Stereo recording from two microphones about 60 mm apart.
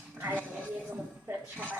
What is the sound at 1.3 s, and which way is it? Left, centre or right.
Speech, right.